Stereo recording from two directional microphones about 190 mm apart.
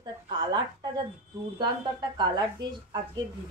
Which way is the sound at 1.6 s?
20° right (ahead or behind).